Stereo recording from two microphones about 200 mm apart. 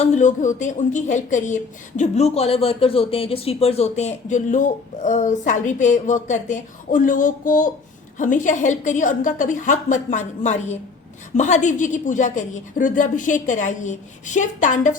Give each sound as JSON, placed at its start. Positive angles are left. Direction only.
{"t": 0.0, "sound": "speech", "side_deg": 35}